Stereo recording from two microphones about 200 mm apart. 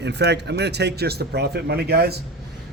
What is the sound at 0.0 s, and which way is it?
Speech, 60° right (ahead or behind).